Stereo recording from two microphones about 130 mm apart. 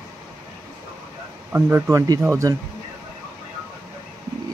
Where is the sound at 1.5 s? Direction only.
20° right (ahead or behind).